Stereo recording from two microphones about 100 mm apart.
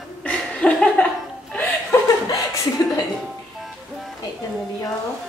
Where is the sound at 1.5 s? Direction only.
15° left (ahead or behind).